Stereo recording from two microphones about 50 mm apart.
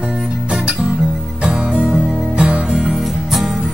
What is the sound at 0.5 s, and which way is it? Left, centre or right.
Music, centre.